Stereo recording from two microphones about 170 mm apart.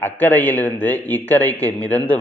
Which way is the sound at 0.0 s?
10° left (ahead or behind).